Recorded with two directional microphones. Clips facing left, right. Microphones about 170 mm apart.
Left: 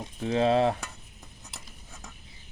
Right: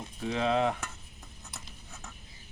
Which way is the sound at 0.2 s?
35° left (ahead or behind).